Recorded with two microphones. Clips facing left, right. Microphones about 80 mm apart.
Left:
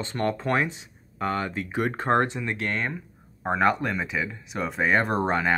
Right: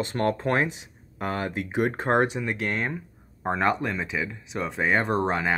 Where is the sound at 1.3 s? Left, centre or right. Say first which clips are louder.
Right 1 dB; right.